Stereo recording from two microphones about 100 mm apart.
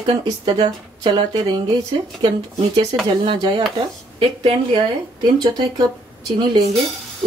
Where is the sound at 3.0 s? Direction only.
50° right (ahead or behind).